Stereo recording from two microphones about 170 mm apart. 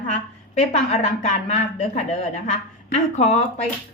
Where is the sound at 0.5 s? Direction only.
40° left (ahead or behind).